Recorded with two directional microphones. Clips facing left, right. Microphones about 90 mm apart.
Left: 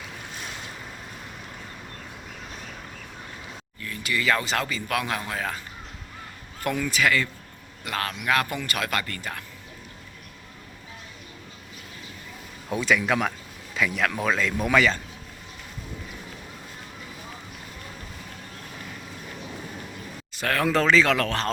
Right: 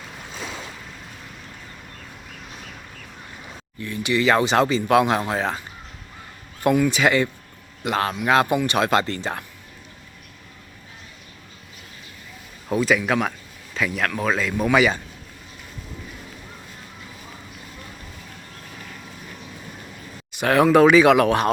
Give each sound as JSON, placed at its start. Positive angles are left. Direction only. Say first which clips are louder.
{"t": 3.8, "sound": "speech", "louder": "right 7 dB", "side_deg": -20}
{"t": 6.6, "sound": "speech", "louder": "right 7 dB", "side_deg": -20}
{"t": 12.6, "sound": "speech", "louder": "right 3 dB", "side_deg": 0}
{"t": 20.3, "sound": "speech", "louder": "right 8 dB", "side_deg": -15}